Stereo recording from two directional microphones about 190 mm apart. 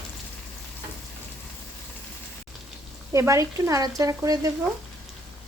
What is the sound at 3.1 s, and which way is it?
Speech, 15° right (ahead or behind).